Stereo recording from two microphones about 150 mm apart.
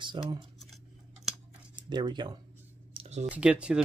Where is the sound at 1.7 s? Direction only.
30° right (ahead or behind).